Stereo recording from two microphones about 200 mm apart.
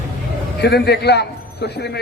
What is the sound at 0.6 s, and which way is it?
A man's voice, 55° left (ahead or behind).